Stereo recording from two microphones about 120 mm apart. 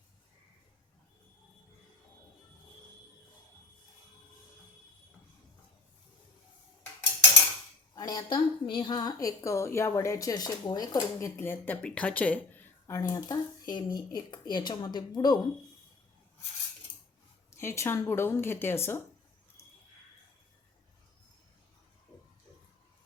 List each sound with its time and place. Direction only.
7.9 s a woman's voice: 35° left (ahead or behind); by 12.6 s 15° left (ahead or behind)
12.9 s speech: 25° left (ahead or behind)
17.5 s a woman's voice: 20° left (ahead or behind)